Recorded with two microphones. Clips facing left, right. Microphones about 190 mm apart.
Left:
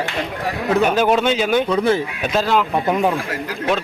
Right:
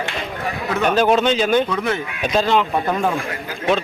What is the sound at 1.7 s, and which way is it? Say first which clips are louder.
Speech: left 5 dB; 30° left (ahead or behind).